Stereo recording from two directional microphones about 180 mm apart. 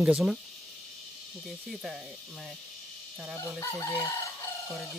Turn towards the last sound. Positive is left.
turn(degrees=15)  # may be behind; listen again after turning